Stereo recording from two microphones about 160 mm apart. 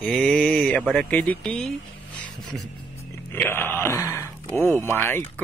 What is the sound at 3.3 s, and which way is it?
Speech, 10° left (ahead or behind).